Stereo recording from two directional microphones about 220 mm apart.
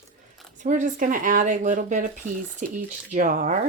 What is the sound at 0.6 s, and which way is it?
Speech, 35° right (ahead or behind).